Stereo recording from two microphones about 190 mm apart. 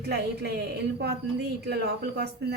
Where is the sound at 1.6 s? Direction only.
60° right (ahead or behind).